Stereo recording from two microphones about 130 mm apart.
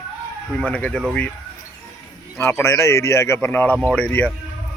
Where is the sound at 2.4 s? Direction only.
15° left (ahead or behind).